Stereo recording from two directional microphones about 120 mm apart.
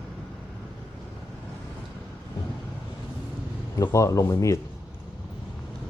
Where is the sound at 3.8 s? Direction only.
25° left (ahead or behind).